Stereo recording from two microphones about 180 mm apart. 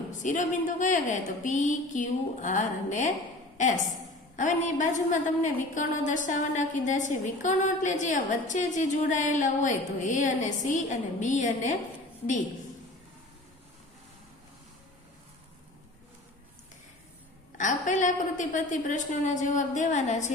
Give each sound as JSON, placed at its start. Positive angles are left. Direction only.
{"t": 0.2, "sound": "a woman's voice", "side_deg": 45}
{"t": 4.4, "sound": "a woman's voice", "side_deg": 45}
{"t": 17.6, "sound": "a woman's voice", "side_deg": 45}